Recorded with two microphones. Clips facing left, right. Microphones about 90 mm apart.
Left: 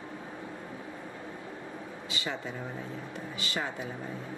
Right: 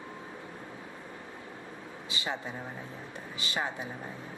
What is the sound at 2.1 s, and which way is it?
A woman's voice, 20° right (ahead or behind).